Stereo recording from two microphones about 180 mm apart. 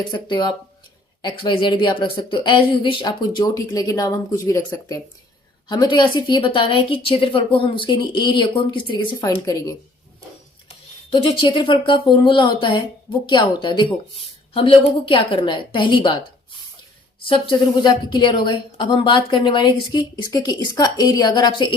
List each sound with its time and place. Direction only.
0.1 s speech: 25° left (ahead or behind)
17.2 s speech: 30° left (ahead or behind)